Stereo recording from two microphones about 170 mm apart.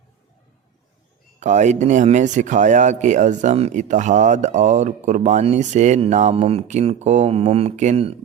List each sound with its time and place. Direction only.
1.4 s speech: 45° right (ahead or behind)